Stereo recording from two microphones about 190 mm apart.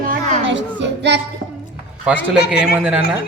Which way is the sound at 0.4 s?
70° right (ahead or behind).